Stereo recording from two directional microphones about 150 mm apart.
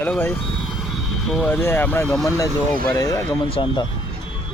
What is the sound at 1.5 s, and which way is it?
Speech, 15° left (ahead or behind).